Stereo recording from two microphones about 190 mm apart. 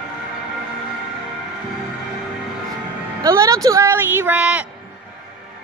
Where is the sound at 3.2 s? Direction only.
15° right (ahead or behind).